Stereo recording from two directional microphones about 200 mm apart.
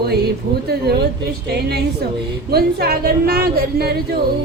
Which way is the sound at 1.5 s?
55° right (ahead or behind).